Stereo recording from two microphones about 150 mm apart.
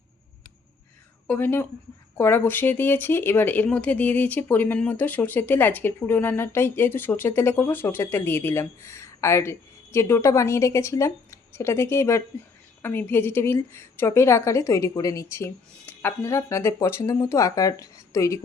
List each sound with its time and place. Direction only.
1.3 s a woman's voice: 15° left (ahead or behind)